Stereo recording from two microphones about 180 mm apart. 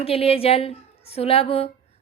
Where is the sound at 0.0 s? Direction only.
35° left (ahead or behind).